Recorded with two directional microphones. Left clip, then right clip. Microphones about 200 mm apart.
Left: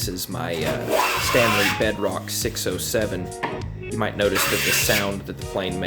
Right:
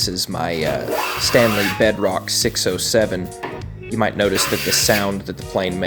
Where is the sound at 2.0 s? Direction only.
35° right (ahead or behind).